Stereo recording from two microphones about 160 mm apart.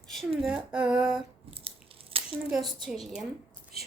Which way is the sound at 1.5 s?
35° right (ahead or behind).